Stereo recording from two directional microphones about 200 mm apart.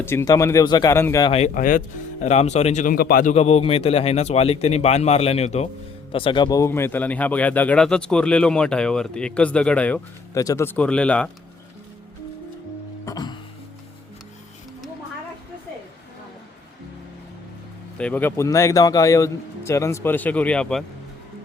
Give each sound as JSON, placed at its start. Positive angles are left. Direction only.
{"t": 0.0, "sound": "a man's voice", "side_deg": 10}
{"t": 1.3, "sound": "a man's voice", "side_deg": 35}
{"t": 13.1, "sound": "music", "side_deg": 20}
{"t": 17.9, "sound": "a man's voice", "side_deg": 5}